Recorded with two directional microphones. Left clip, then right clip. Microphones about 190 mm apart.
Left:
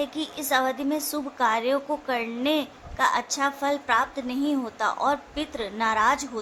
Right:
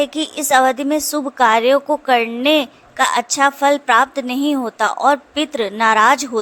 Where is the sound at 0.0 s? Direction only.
45° right (ahead or behind).